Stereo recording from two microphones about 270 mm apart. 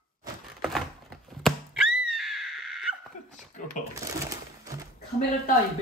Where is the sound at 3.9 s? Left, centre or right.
Centre.